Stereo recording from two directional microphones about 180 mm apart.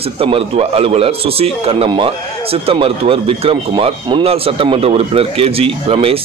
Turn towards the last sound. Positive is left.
turn(degrees=-30)  # may be behind; listen again after turning